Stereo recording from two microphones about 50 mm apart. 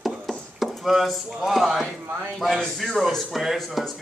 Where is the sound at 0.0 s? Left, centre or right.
Centre.